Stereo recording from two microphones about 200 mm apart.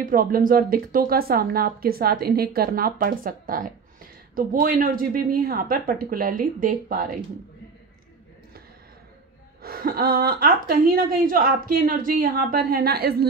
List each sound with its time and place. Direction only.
0.0 s speech: 45° right (ahead or behind)
9.6 s speech: 45° right (ahead or behind)